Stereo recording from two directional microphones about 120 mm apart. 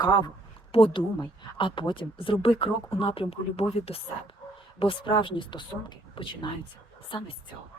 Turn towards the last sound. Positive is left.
turn(degrees=45)  # may be behind; listen again after turning